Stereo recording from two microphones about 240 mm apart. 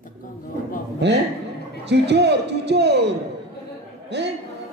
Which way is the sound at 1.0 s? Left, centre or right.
Right.